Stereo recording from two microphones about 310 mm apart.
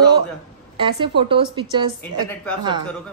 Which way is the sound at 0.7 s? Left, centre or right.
Centre.